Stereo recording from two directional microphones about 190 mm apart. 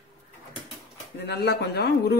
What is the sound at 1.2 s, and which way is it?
Speech, 60° left (ahead or behind).